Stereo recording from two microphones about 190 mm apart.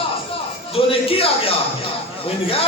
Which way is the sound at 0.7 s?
30° left (ahead or behind).